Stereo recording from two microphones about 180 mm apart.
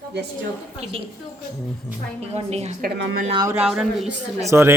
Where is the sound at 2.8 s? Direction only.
55° right (ahead or behind).